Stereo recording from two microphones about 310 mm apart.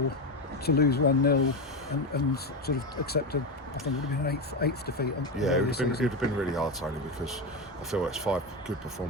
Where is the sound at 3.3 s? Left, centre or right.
Left.